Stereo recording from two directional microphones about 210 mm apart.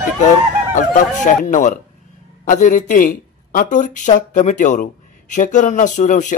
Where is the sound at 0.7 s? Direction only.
35° left (ahead or behind).